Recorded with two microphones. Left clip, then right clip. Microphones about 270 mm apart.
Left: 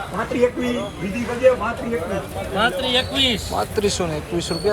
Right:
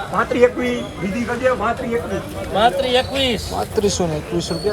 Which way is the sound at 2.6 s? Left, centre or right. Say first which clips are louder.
Right 4 dB; right.